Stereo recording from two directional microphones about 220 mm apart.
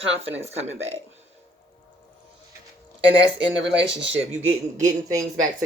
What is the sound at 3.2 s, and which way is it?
Speech, 55° right (ahead or behind).